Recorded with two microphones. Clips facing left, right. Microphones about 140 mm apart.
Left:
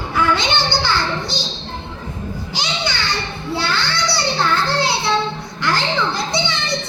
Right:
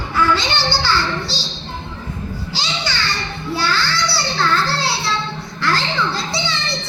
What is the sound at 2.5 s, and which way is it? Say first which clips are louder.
Music: left 2 dB; 15° left (ahead or behind).